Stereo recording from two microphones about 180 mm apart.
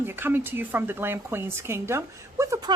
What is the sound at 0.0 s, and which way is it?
A woman's voice, 10° right (ahead or behind).